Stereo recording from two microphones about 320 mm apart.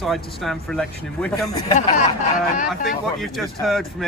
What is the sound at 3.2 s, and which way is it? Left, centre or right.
Speech, centre.